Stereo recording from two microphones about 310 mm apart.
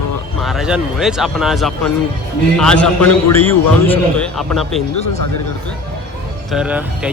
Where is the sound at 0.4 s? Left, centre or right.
Centre.